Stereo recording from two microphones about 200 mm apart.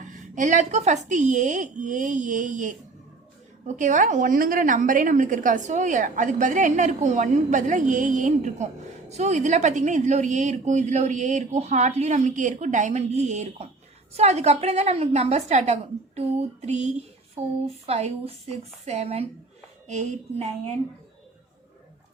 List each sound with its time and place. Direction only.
0.0 s a woman's voice: 40° right (ahead or behind)